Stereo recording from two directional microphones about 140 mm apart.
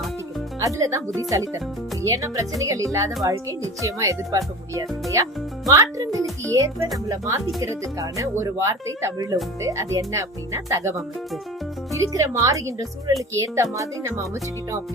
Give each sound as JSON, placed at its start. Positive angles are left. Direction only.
{"t": 0.6, "sound": "speech", "side_deg": -25}